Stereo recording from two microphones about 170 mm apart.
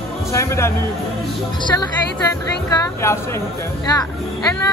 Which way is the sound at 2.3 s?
15° left (ahead or behind).